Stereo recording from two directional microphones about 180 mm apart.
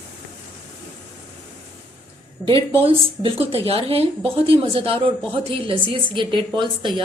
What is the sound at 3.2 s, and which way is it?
A woman's voice, 30° right (ahead or behind).